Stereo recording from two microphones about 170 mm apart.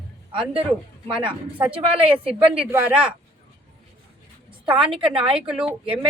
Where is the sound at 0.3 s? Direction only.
30° right (ahead or behind).